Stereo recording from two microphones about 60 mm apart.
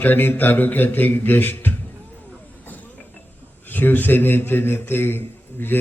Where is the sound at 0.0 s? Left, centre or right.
Left.